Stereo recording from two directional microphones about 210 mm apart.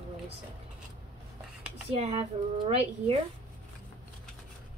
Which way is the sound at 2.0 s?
30° right (ahead or behind).